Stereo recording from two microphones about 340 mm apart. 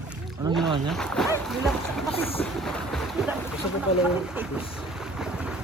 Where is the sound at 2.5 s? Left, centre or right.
Centre.